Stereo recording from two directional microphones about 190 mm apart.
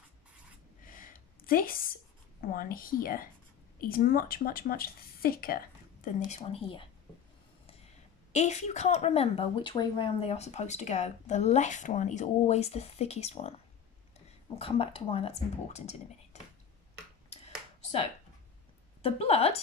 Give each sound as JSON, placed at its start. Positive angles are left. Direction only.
{"t": 0.8, "sound": "a sound", "side_deg": 45}
{"t": 2.4, "sound": "speech", "side_deg": 50}
{"t": 6.1, "sound": "a woman's voice", "side_deg": 40}
{"t": 8.3, "sound": "a woman's voice", "side_deg": 35}
{"t": 19.0, "sound": "a woman's voice", "side_deg": 30}